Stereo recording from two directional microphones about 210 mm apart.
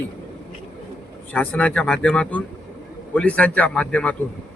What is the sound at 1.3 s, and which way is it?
Speech, 5° left (ahead or behind).